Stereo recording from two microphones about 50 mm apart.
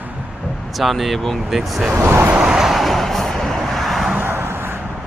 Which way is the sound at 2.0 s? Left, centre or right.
Right.